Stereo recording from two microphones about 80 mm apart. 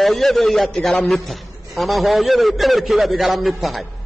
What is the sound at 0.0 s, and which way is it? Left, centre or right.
A man's voice, centre.